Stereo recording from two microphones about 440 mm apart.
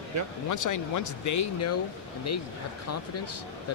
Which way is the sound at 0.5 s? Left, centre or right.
Left.